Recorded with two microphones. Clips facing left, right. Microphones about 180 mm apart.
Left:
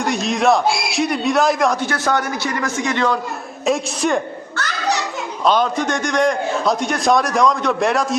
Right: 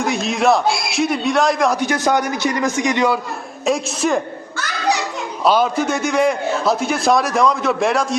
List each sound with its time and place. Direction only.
0.0 s a man's voice: centre (ahead or behind)
1.7 s a man's voice: 15° right (ahead or behind)
3.7 s a man's voice: centre (ahead or behind)
5.5 s a man's voice: 5° right (ahead or behind)